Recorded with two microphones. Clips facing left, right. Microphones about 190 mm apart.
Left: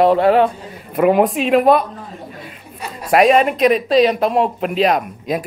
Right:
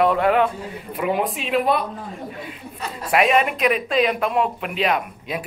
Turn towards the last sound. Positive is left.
turn(degrees=40)  # may be behind; listen again after turning